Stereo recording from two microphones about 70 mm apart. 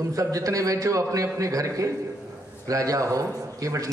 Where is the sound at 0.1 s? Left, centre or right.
Right.